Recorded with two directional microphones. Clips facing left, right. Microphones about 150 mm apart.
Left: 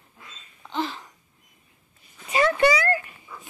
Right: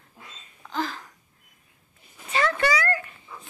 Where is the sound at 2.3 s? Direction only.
15° left (ahead or behind).